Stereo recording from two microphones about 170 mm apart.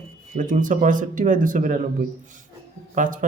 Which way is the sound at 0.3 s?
50° right (ahead or behind).